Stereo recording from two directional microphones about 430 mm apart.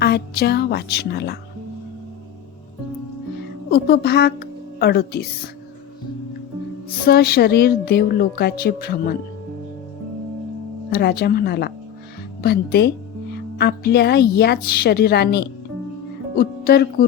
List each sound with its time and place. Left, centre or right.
0.0 s speech: left
3.7 s speech: left
7.1 s speech: left
10.9 s speech: left